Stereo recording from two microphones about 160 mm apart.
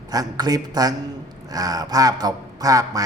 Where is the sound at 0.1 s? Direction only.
25° right (ahead or behind).